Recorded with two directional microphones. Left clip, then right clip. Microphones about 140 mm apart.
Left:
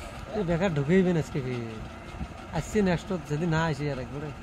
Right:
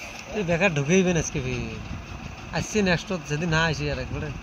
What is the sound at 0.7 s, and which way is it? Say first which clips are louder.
Speech: right 3 dB; 25° right (ahead or behind).